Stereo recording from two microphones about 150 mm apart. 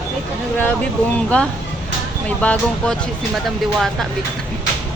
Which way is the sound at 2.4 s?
10° left (ahead or behind).